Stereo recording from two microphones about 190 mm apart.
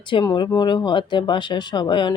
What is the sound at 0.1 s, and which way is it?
Speech, 25° left (ahead or behind).